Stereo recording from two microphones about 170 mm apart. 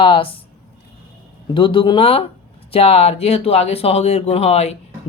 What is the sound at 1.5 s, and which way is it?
Speech, 30° left (ahead or behind).